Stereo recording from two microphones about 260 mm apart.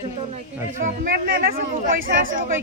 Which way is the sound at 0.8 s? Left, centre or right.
Right.